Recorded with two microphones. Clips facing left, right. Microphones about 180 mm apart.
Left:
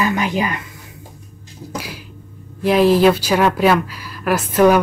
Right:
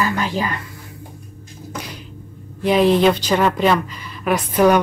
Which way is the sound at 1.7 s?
5° left (ahead or behind).